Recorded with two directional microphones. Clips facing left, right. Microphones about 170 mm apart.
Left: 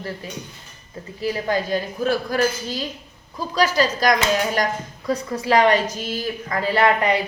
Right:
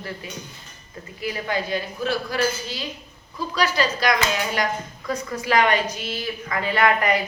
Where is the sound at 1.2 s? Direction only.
35° left (ahead or behind).